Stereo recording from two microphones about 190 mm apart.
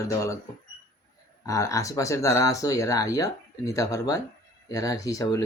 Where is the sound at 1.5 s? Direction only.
15° left (ahead or behind).